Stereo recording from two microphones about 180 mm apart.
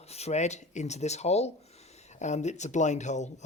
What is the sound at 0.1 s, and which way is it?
A woman's voice, 35° left (ahead or behind).